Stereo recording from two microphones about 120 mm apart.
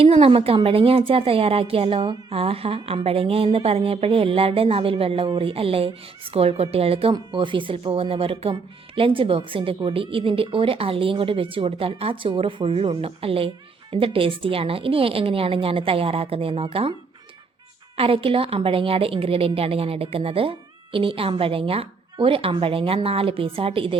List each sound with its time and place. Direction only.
0.0 s a woman's voice: 55° right (ahead or behind)
17.9 s a woman's voice: 50° right (ahead or behind)